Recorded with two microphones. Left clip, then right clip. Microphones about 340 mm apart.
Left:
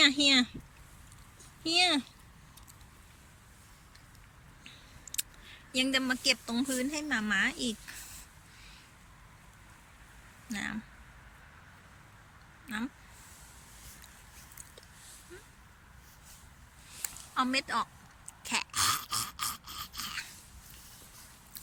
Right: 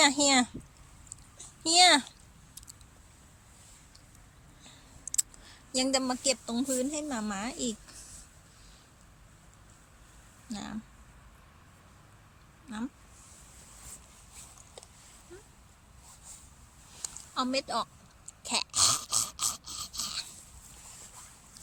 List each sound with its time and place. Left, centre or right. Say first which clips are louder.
0.0 s a woman's voice: even; centre
1.6 s speech: right 6 dB; right
5.1 s speech: right 5 dB; centre
10.5 s speech: left 5 dB; centre
12.6 s speech: left 2 dB; centre
17.0 s a sound: left 2 dB; centre